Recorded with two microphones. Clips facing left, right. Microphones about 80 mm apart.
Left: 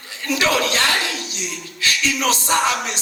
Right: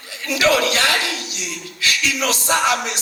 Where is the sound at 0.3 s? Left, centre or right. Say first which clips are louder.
Right 2 dB; left.